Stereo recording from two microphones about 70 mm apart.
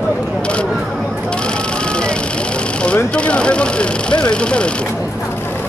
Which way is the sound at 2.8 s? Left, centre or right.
Centre.